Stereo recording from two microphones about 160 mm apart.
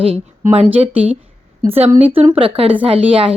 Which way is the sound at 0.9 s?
10° right (ahead or behind).